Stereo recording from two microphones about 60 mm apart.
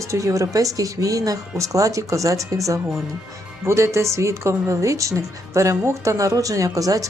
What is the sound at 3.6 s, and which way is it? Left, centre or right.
A woman's voice, right.